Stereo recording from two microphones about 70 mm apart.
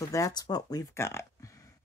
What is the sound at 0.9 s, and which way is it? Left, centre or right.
Speech, left.